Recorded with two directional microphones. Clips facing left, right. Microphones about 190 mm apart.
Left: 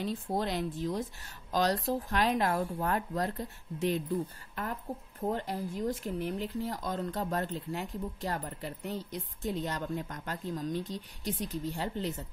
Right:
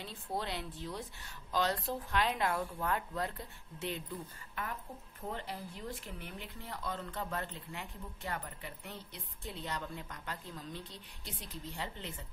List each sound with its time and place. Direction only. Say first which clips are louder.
0.0 s a woman's voice: left 7 dB; 40° left (ahead or behind)